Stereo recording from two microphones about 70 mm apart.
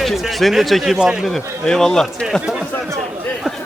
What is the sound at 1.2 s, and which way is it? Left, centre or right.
Speech, centre.